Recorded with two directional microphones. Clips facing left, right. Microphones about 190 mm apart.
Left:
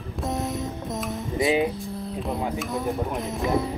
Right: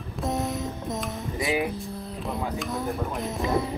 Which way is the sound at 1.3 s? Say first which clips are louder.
Left 5 dB; 20° left (ahead or behind).